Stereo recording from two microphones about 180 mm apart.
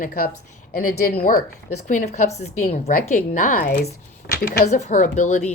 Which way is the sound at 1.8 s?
40° left (ahead or behind).